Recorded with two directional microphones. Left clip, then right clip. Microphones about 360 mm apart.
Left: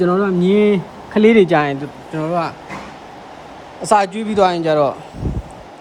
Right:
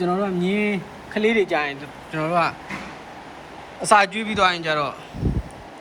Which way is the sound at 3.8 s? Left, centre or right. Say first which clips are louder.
Left 2 dB; centre.